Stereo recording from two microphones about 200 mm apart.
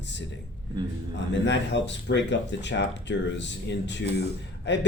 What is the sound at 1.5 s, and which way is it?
Speech, 60° left (ahead or behind).